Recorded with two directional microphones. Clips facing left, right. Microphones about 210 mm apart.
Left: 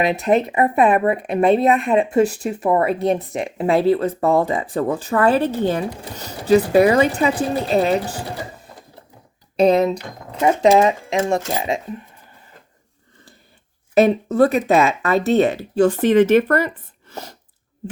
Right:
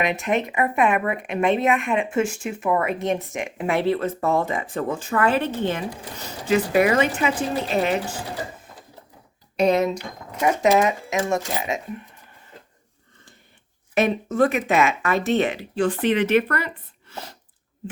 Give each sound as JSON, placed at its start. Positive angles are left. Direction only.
{"t": 0.0, "sound": "speech", "side_deg": 35}
{"t": 9.6, "sound": "speech", "side_deg": 35}
{"t": 13.9, "sound": "speech", "side_deg": 35}